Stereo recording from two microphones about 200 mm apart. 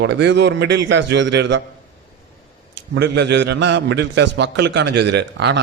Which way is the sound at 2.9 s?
60° right (ahead or behind).